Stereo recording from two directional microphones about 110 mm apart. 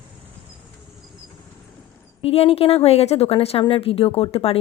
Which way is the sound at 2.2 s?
65° left (ahead or behind).